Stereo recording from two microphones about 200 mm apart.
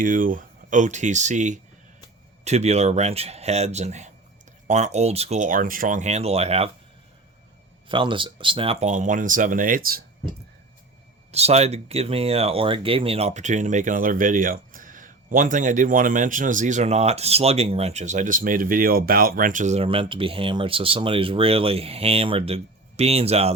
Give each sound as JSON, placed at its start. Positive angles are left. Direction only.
{"t": 0.0, "sound": "speech", "side_deg": -45}
{"t": 7.9, "sound": "speech", "side_deg": -25}
{"t": 11.3, "sound": "speech", "side_deg": -30}